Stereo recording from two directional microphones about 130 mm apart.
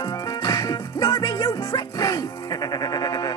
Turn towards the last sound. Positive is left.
turn(degrees=30)  # may be behind; listen again after turning